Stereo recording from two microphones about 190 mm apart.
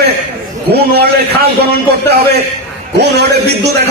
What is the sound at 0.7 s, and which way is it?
Speech, 55° right (ahead or behind).